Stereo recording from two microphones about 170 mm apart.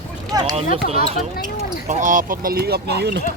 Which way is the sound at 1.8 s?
50° right (ahead or behind).